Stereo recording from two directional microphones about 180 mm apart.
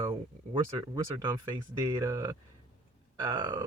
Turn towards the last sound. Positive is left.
turn(degrees=-25)  # may be behind; listen again after turning